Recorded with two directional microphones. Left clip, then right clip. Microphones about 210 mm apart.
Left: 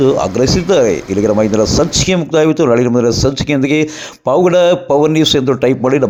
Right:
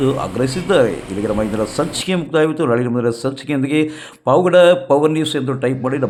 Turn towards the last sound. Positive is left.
turn(degrees=20)  # may be behind; listen again after turning